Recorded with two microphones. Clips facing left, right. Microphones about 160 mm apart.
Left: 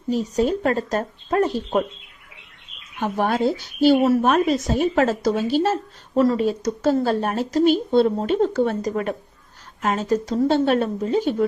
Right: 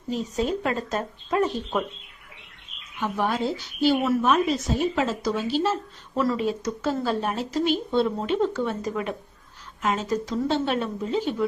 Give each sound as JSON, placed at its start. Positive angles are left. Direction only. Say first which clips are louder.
{"t": 0.1, "sound": "speech", "louder": "left 5 dB", "side_deg": 35}
{"t": 3.0, "sound": "speech", "louder": "left 5 dB", "side_deg": 45}